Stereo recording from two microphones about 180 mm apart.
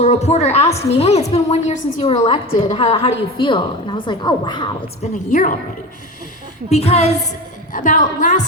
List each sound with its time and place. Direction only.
0.0 s a woman's voice: 35° left (ahead or behind)
5.3 s a woman's voice: 45° left (ahead or behind)
6.7 s a woman's voice: 35° left (ahead or behind)
7.7 s a woman's voice: 45° left (ahead or behind)